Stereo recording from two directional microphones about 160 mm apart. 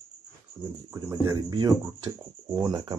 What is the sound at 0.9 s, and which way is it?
Speech, 20° right (ahead or behind).